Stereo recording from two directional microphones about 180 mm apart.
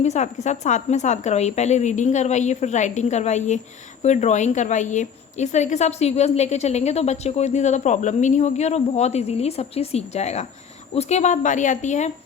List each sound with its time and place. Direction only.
0.0 s a woman's voice: 40° left (ahead or behind)